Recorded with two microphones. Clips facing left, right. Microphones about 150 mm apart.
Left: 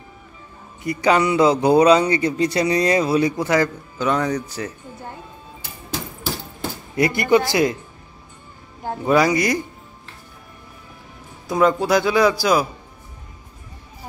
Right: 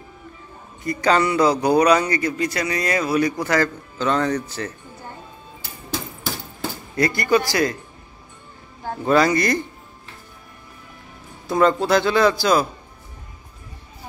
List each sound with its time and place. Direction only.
0.8 s speech: 15° left (ahead or behind)
7.0 s speech: 20° left (ahead or behind)
8.8 s speech: 10° left (ahead or behind)
11.4 s speech: 10° left (ahead or behind)